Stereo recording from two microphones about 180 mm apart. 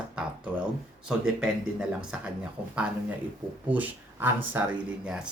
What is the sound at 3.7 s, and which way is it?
Speech, 10° right (ahead or behind).